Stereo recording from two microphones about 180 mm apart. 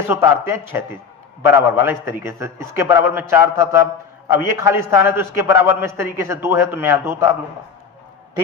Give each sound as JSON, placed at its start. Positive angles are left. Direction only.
{"t": 0.1, "sound": "a man's voice", "side_deg": -15}